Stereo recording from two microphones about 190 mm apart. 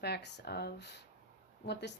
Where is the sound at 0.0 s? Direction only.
60° left (ahead or behind).